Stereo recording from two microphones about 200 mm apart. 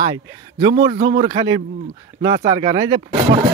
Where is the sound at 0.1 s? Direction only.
20° right (ahead or behind).